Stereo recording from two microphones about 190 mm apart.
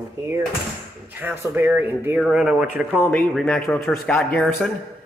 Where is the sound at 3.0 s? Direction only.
10° left (ahead or behind).